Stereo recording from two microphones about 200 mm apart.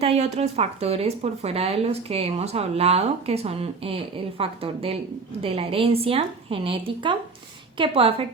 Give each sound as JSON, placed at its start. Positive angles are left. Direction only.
{"t": 0.0, "sound": "speech", "side_deg": -30}